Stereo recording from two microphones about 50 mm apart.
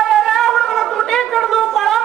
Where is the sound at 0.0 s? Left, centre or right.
Centre.